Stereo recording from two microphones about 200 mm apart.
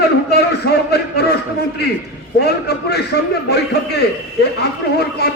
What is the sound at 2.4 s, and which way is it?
A man's voice, 55° left (ahead or behind).